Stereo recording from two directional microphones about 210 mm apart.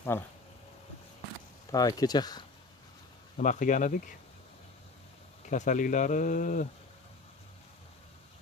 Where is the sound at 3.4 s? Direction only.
35° left (ahead or behind).